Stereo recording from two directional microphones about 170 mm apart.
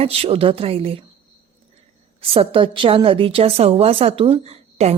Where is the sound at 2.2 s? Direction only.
30° right (ahead or behind).